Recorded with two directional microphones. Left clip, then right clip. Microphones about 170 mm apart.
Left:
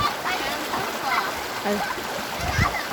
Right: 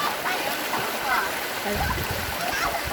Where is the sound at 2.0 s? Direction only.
50° right (ahead or behind).